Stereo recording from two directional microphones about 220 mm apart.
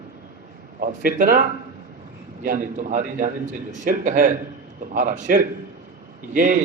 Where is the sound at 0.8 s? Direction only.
40° right (ahead or behind).